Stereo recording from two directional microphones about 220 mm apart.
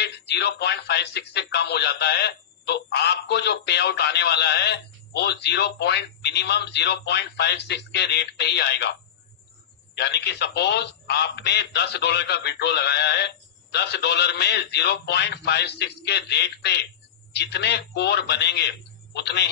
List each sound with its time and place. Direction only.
0.0 s speech: 50° left (ahead or behind)
9.9 s a man's voice: 50° left (ahead or behind)